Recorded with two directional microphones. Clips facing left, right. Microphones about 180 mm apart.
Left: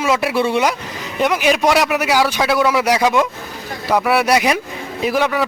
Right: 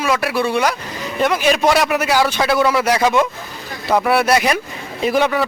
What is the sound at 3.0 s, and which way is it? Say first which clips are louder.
Speech: even; centre (ahead or behind).